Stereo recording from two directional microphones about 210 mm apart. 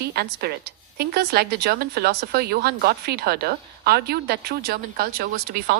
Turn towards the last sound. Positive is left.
turn(degrees=-45)  # may be behind; listen again after turning